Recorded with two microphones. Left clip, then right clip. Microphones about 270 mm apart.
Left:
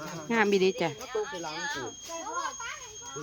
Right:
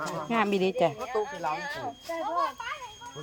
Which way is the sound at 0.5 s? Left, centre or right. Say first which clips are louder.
Right 1 dB; centre.